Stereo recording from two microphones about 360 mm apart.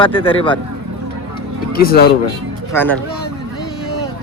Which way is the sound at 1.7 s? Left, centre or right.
Left.